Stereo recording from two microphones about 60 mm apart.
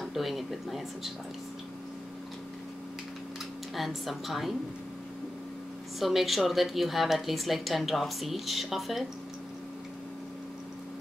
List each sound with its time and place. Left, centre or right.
0.0 s a woman's voice: centre
3.7 s a woman's voice: centre
5.9 s a woman's voice: centre